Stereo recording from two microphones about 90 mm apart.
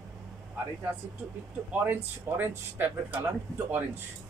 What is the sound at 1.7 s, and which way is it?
Speech, 20° right (ahead or behind).